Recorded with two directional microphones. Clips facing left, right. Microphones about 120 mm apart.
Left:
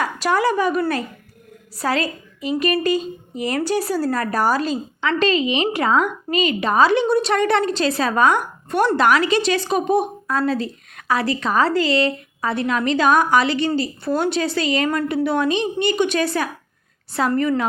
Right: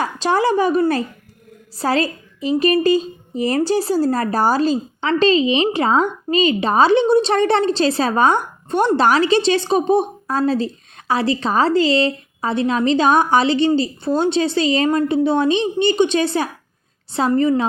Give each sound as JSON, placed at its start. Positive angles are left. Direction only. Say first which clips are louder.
{"t": 0.0, "sound": "a woman's voice", "louder": "right 2 dB", "side_deg": -30}